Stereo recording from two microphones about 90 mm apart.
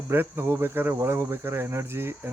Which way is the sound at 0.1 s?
25° right (ahead or behind).